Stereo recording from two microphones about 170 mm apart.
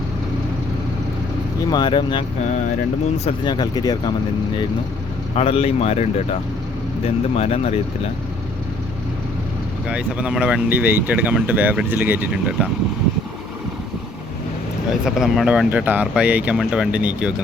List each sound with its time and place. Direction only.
1.7 s speech: 25° left (ahead or behind)
3.2 s speech: 25° left (ahead or behind)
5.3 s speech: 35° left (ahead or behind)
9.9 s speech: 5° right (ahead or behind)
15.0 s speech: 5° right (ahead or behind)